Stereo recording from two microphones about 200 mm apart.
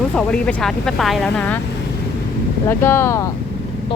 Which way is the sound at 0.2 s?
5° left (ahead or behind).